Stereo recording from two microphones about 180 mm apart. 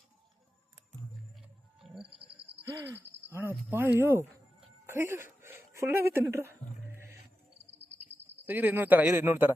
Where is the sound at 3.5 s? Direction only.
10° right (ahead or behind).